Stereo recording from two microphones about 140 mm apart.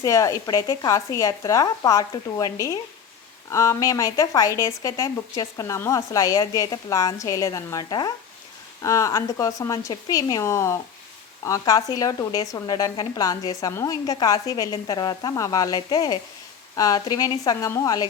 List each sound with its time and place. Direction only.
0.0 s a woman's voice: 20° left (ahead or behind)